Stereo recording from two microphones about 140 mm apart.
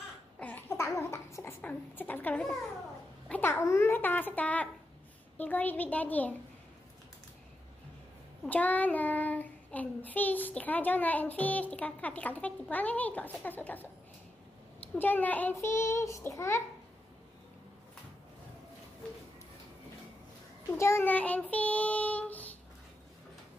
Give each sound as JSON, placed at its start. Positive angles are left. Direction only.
{"t": 0.4, "sound": "a sound", "side_deg": 15}
{"t": 3.3, "sound": "child singing", "side_deg": 15}
{"t": 8.5, "sound": "child singing", "side_deg": 10}
{"t": 20.7, "sound": "child singing", "side_deg": 20}